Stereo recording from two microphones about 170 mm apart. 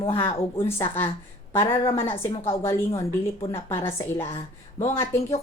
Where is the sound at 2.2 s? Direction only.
15° left (ahead or behind).